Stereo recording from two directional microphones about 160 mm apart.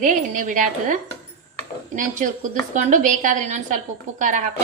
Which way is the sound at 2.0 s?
55° right (ahead or behind).